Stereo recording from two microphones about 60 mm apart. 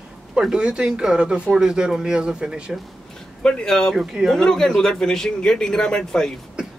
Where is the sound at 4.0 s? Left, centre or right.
Centre.